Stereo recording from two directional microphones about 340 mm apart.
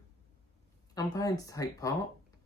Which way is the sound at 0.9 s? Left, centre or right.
Centre.